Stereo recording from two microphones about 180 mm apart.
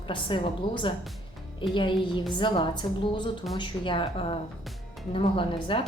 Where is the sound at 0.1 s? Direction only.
25° left (ahead or behind).